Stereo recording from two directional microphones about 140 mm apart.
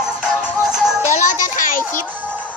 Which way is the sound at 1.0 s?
60° left (ahead or behind).